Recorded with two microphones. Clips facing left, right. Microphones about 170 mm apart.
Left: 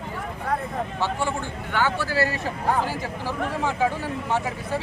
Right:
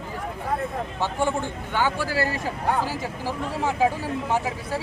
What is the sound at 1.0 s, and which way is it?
A man's voice, 15° right (ahead or behind).